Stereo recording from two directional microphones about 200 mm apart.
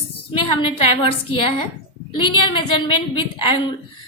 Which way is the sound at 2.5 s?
25° left (ahead or behind).